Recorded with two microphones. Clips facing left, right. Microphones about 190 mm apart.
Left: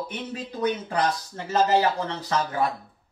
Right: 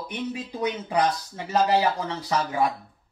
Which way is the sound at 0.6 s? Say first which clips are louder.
Even; 10° right (ahead or behind).